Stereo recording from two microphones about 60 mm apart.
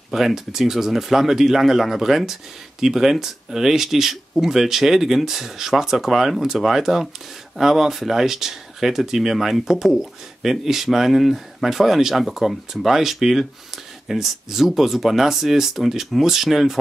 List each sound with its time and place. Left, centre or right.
0.1 s speech: centre